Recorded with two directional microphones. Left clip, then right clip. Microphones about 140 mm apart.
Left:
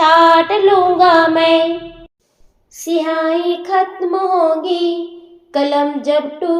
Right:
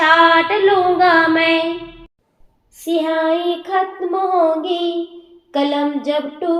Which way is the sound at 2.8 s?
40° left (ahead or behind).